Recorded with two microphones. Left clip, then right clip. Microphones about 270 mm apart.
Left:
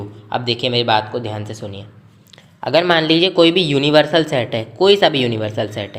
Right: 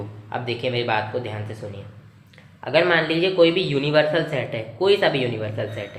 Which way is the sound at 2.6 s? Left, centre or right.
Left.